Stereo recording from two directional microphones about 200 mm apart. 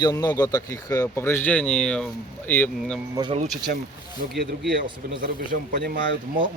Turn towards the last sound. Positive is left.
turn(degrees=-50)  # may be behind; listen again after turning